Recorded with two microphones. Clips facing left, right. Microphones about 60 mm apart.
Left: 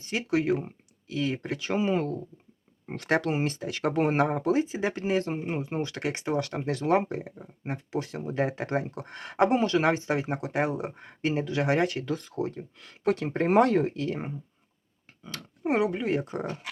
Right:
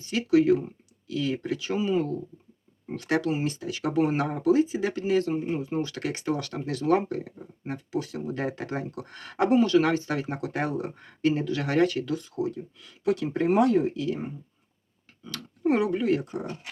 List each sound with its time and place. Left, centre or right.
0.0 s speech: left
1.5 s speech: left
8.3 s speech: left
12.1 s speech: left
13.5 s speech: left
15.2 s speech: left